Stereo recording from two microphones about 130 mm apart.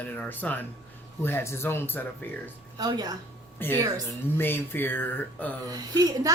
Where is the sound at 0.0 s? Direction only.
15° left (ahead or behind).